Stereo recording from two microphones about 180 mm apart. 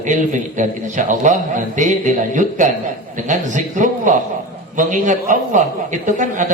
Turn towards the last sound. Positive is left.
turn(degrees=-45)  # may be behind; listen again after turning